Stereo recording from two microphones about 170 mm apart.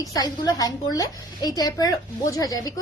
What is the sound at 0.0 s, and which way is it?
A woman's voice, 20° left (ahead or behind).